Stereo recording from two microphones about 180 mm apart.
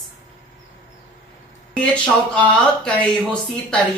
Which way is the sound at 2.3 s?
5° left (ahead or behind).